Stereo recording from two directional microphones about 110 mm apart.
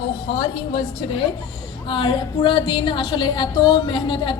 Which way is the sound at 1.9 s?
50° left (ahead or behind).